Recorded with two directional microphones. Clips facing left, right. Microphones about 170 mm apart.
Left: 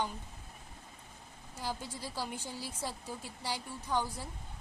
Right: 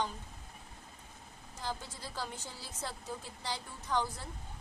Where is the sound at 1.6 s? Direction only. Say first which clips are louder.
Left 2 dB; 10° left (ahead or behind).